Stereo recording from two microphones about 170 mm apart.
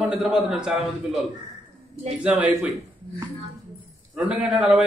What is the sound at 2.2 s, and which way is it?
Speech, 5° right (ahead or behind).